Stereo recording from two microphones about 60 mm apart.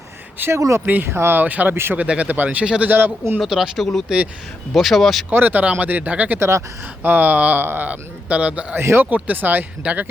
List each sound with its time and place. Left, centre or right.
0.4 s speech: right
1.0 s speech: right
1.4 s speech: right
1.7 s speech: right
2.0 s speech: right
2.6 s speech: centre
2.9 s speech: right
3.4 s speech: centre
4.7 s speech: centre
5.3 s speech: right
7.6 s speech: right
7.9 s speech: right
8.8 s speech: right
9.0 s speech: right